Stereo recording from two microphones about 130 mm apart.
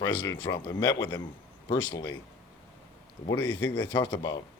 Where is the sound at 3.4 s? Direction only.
35° left (ahead or behind).